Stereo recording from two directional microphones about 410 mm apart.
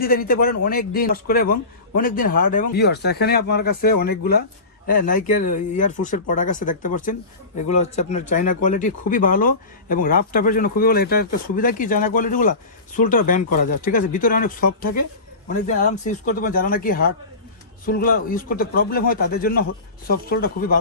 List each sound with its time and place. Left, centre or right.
0.0 s speech: left